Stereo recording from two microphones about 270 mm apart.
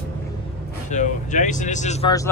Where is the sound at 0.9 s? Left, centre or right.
Left.